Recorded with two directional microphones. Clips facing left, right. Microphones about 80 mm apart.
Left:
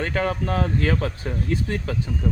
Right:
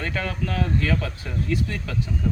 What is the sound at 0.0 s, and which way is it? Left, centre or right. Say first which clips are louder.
Speech: left 4 dB; left.